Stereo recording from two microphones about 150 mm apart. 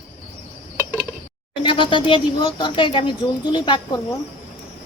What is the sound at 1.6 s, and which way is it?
Speech, 35° left (ahead or behind).